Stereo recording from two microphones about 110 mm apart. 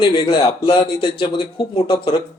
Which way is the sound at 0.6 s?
45° left (ahead or behind).